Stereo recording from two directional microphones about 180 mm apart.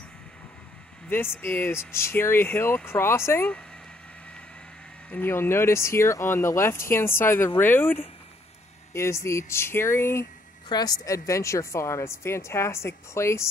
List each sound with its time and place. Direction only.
1.1 s speech: 10° left (ahead or behind)
5.1 s speech: 10° left (ahead or behind)